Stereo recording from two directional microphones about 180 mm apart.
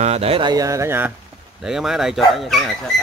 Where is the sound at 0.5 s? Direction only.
20° right (ahead or behind).